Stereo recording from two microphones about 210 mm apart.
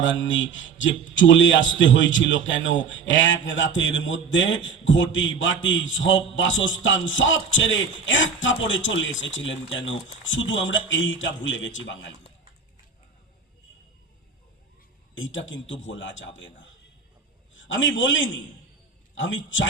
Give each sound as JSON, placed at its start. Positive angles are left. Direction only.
{"t": 0.0, "sound": "a man's voice", "side_deg": 65}
{"t": 15.1, "sound": "a man's voice", "side_deg": 65}